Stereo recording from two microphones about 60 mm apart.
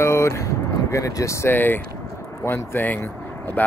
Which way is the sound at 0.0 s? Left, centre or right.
Left.